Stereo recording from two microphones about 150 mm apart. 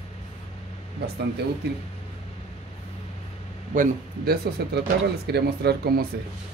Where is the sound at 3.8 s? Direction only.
90° right.